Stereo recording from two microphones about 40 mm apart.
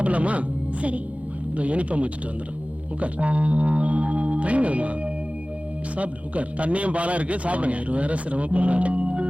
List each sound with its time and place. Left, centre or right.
0.0 s a man's voice: right